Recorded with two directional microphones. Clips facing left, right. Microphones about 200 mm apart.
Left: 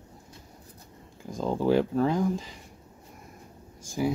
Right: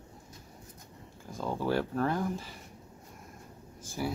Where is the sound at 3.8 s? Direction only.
15° left (ahead or behind).